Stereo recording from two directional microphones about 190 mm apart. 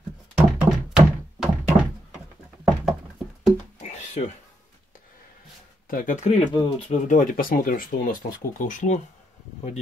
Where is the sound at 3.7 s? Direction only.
35° left (ahead or behind).